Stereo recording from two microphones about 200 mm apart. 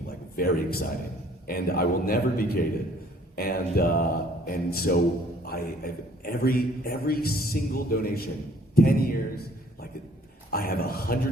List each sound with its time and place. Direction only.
0.3 s a man's voice: 50° left (ahead or behind)
10.5 s a man's voice: 50° left (ahead or behind)